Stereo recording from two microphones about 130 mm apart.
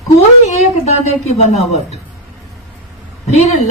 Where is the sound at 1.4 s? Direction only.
60° left (ahead or behind).